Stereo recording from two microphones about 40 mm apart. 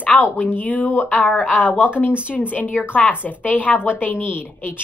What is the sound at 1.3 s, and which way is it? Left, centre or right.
Speech, left.